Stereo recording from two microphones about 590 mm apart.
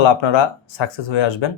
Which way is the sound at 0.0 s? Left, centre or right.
Left.